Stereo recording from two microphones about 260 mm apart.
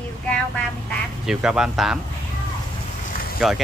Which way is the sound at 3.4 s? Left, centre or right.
Centre.